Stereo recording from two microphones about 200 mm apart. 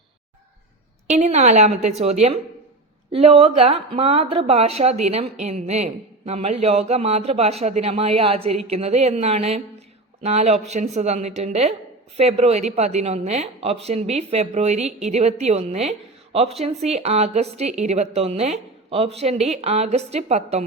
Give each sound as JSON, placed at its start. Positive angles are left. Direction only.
{"t": 1.1, "sound": "a woman's voice", "side_deg": -35}